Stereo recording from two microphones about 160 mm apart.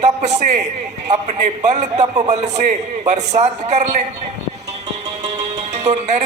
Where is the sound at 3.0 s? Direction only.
45° right (ahead or behind).